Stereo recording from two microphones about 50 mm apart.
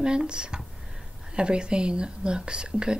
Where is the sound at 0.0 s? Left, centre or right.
Centre.